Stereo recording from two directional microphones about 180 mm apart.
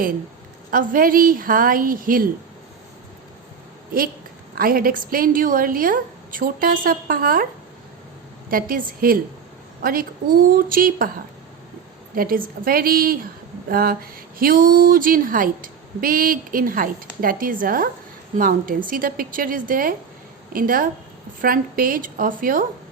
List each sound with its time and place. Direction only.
0.7 s speech: 50° right (ahead or behind)
4.5 s speech: 55° right (ahead or behind)
8.4 s speech: 50° right (ahead or behind)
12.1 s speech: 50° right (ahead or behind)